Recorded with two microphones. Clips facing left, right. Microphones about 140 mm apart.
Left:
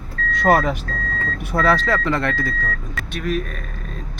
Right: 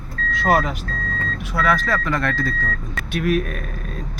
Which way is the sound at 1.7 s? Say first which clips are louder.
Left 2 dB; 25° left (ahead or behind).